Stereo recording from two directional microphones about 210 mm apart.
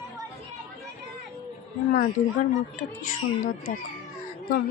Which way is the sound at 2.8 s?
35° left (ahead or behind).